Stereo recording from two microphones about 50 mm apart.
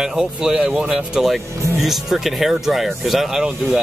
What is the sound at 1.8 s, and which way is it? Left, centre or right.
Speech, centre.